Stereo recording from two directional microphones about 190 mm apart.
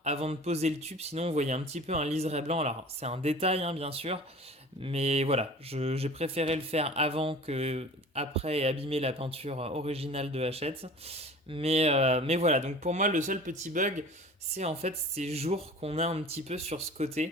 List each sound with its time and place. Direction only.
0.0 s speech: 35° right (ahead or behind)